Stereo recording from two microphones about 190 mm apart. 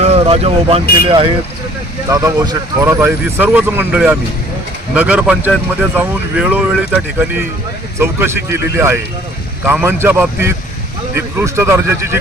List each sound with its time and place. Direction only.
0.0 s vehicle: 30° right (ahead or behind)
1.0 s speech: 30° right (ahead or behind)
2.0 s speech: 15° right (ahead or behind)